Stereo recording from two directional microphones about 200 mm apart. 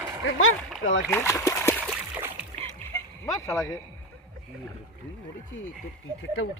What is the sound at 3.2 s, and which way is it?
Speech, 15° left (ahead or behind).